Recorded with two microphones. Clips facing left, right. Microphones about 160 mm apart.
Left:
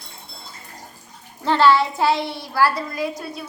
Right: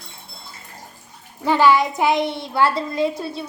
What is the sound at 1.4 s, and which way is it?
A child's voice, 10° right (ahead or behind).